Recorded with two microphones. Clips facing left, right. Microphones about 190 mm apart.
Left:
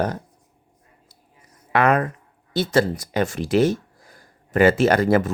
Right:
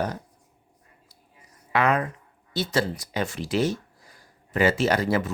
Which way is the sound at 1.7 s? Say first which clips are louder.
Left 4 dB; 55° left (ahead or behind).